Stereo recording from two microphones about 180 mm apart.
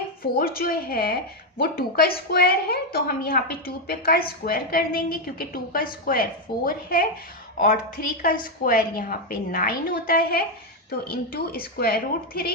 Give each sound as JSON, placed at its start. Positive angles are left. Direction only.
{"t": 0.2, "sound": "a woman's voice", "side_deg": 55}